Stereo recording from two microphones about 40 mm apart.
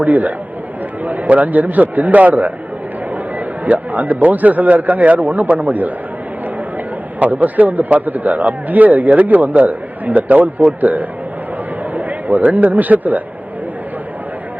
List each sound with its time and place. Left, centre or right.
0.0 s a man's voice: right
7.2 s a man's voice: right